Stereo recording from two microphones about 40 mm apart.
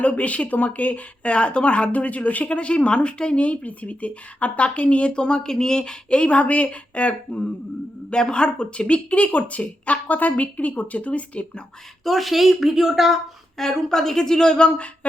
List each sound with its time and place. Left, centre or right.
0.0 s speech: left
12.0 s a woman's voice: centre
13.6 s a woman's voice: centre